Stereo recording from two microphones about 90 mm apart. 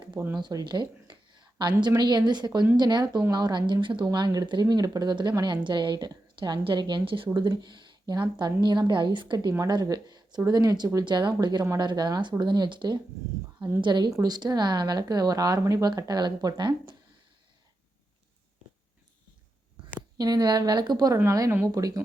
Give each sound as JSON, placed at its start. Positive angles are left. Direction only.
{"t": 0.3, "sound": "a woman's voice", "side_deg": -55}
{"t": 4.0, "sound": "a woman's voice", "side_deg": -50}
{"t": 7.3, "sound": "a woman's voice", "side_deg": -55}
{"t": 9.5, "sound": "a woman's voice", "side_deg": -45}
{"t": 11.0, "sound": "a woman's voice", "side_deg": -60}
{"t": 14.1, "sound": "a woman's voice", "side_deg": -45}
{"t": 16.0, "sound": "a woman's voice", "side_deg": -50}
{"t": 20.1, "sound": "a woman's voice", "side_deg": -45}